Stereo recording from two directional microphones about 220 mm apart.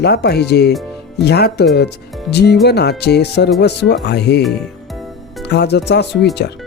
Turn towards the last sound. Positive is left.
turn(degrees=50)  # may be behind; listen again after turning